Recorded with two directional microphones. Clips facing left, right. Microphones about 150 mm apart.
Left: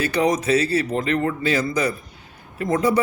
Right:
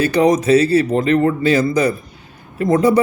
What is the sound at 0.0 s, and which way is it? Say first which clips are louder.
A man's voice: right 6 dB; 35° right (ahead or behind).